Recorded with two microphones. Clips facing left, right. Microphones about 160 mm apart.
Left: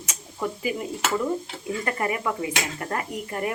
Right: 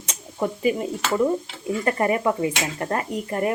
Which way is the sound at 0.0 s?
30° right (ahead or behind).